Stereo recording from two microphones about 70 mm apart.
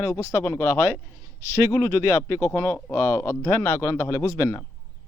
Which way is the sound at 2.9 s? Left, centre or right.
Left.